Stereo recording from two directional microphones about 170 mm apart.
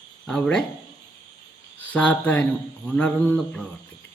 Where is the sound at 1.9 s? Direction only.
10° left (ahead or behind).